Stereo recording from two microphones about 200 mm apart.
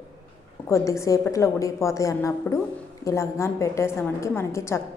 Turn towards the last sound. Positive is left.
turn(degrees=15)  # may be behind; listen again after turning